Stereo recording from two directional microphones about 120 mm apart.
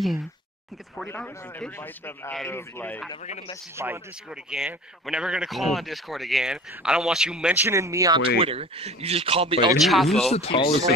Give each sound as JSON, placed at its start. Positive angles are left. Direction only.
{"t": 1.0, "sound": "a man's voice", "side_deg": 20}
{"t": 3.7, "sound": "speech", "side_deg": -20}
{"t": 4.3, "sound": "a man's voice", "side_deg": -5}
{"t": 7.6, "sound": "speech", "side_deg": -25}
{"t": 8.2, "sound": "speech", "side_deg": -50}
{"t": 9.8, "sound": "a man's voice", "side_deg": 0}
{"t": 10.3, "sound": "speech", "side_deg": 50}